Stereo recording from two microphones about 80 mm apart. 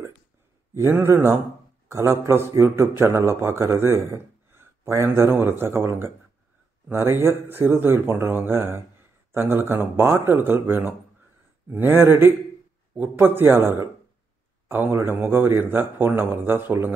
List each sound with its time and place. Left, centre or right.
0.7 s a man's voice: right